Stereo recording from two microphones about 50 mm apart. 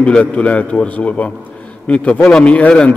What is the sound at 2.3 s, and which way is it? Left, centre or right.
Speech, centre.